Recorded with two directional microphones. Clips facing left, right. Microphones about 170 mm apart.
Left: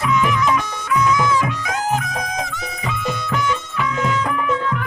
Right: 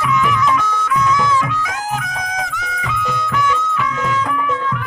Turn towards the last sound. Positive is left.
turn(degrees=25)  # may be behind; listen again after turning